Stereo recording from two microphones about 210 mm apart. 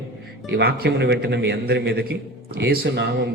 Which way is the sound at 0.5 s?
50° right (ahead or behind).